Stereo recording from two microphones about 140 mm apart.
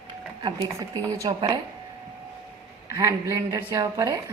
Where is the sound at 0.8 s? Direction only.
25° right (ahead or behind).